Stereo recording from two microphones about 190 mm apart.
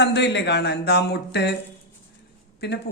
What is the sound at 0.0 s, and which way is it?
A man's voice, 65° left (ahead or behind).